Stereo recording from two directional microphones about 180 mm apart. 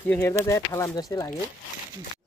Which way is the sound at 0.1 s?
15° left (ahead or behind).